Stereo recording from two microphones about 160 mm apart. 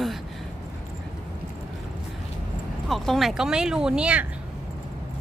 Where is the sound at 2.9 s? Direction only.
Centre (ahead or behind).